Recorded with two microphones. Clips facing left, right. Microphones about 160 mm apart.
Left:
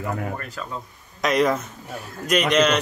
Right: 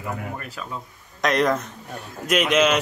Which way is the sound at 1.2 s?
Centre (ahead or behind).